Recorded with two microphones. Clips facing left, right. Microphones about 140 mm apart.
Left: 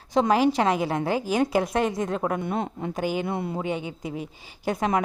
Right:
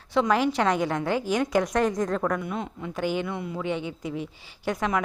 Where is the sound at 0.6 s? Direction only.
30° left (ahead or behind).